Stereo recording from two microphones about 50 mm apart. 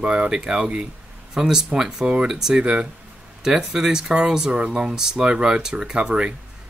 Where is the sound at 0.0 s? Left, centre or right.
Right.